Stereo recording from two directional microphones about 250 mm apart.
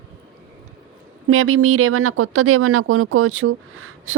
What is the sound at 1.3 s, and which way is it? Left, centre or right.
A woman's voice, right.